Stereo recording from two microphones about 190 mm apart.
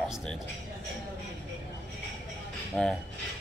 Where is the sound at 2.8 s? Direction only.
5° left (ahead or behind).